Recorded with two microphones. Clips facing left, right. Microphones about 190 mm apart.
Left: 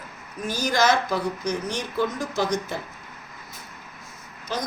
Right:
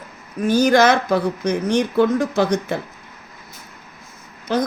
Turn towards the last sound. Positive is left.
turn(degrees=-55)  # may be behind; listen again after turning